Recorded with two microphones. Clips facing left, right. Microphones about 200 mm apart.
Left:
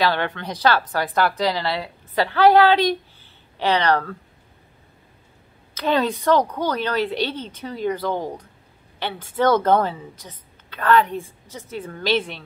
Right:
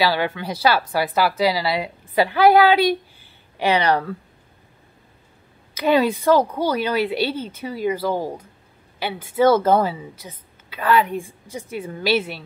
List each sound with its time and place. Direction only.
0.0 s a woman's voice: 5° right (ahead or behind)
5.8 s a woman's voice: 10° right (ahead or behind)